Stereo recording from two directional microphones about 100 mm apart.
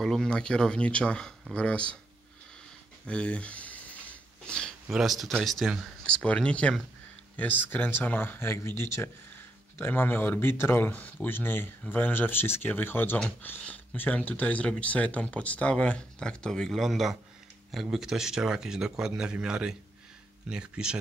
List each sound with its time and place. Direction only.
0.0 s speech: 5° left (ahead or behind)
3.1 s a sound: 10° left (ahead or behind)
4.8 s a man's voice: centre (ahead or behind)